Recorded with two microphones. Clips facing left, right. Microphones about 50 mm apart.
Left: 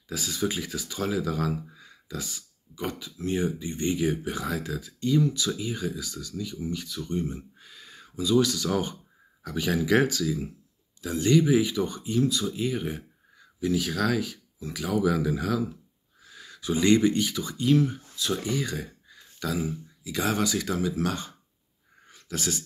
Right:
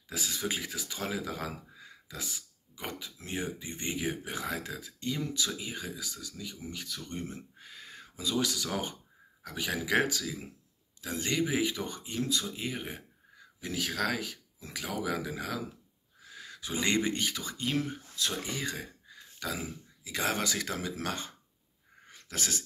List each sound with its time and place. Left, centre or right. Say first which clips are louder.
0.1 s speech: left 5 dB; right
7.5 s a sound: even; right
9.6 s speech: left 6 dB; centre; by 12.4 s right
12.5 s speech: left 8 dB; right
13.6 s speech: left 7 dB; right
22.1 s sneeze: left 5 dB; right